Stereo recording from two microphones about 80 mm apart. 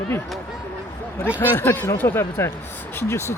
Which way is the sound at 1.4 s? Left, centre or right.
Left.